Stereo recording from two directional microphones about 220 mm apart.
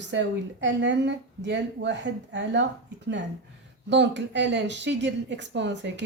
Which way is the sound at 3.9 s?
55° right (ahead or behind).